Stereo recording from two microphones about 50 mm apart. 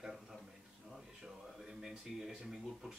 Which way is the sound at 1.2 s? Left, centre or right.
Centre.